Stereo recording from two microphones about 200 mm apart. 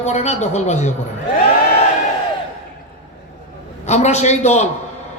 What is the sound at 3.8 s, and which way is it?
Speech, 35° left (ahead or behind).